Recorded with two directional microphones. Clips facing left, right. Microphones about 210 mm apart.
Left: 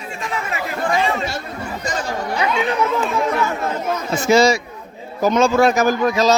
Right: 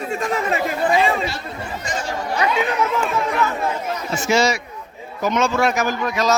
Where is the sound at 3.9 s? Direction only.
60° left (ahead or behind).